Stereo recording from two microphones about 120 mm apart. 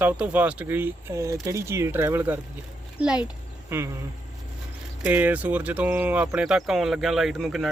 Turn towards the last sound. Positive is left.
turn(degrees=0)  # may be behind; listen again after turning